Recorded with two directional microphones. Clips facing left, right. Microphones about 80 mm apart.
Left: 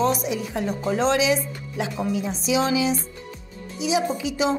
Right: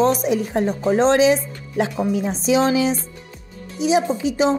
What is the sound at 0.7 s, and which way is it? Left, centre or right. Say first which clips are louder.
A woman's voice: right 5 dB; right.